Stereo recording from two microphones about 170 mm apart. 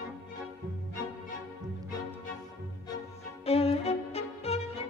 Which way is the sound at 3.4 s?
35° left (ahead or behind).